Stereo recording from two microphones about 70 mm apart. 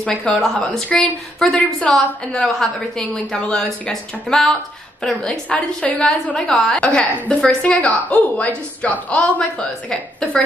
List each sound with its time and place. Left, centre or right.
0.0 s a woman's voice: centre
2.6 s a woman's voice: centre
5.5 s a woman's voice: centre